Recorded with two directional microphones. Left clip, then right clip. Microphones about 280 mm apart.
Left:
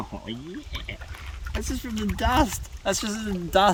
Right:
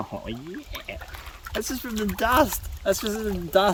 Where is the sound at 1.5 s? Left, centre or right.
Right.